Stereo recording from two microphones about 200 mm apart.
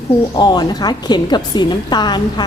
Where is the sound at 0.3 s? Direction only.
20° left (ahead or behind).